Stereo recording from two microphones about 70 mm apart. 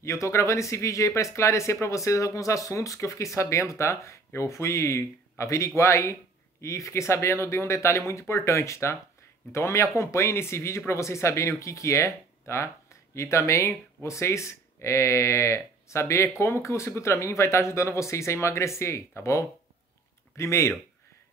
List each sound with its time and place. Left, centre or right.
0.0 s speech: left